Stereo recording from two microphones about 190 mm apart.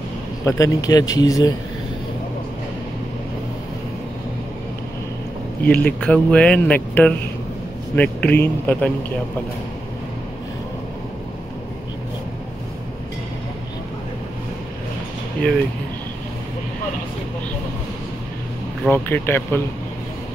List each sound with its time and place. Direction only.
0.5 s speech: 15° left (ahead or behind)
5.7 s speech: 5° left (ahead or behind)
18.9 s speech: 10° left (ahead or behind)